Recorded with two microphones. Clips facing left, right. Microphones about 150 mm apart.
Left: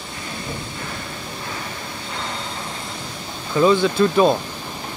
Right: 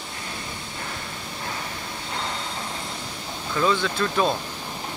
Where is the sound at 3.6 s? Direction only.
15° left (ahead or behind).